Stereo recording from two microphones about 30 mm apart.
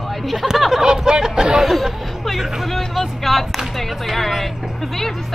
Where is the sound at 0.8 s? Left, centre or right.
Right.